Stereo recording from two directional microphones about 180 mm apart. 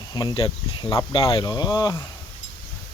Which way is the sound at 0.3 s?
25° left (ahead or behind).